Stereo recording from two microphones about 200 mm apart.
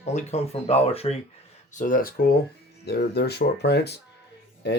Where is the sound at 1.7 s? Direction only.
40° left (ahead or behind).